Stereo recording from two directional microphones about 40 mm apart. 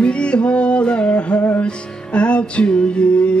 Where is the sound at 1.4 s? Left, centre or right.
Left.